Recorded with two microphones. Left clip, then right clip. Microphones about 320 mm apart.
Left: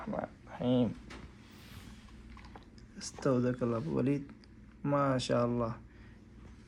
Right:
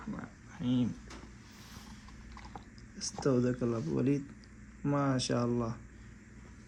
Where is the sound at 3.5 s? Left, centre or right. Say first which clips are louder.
Even; left.